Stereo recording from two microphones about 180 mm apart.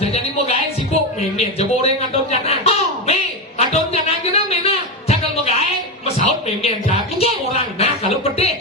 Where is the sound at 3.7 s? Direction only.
35° left (ahead or behind).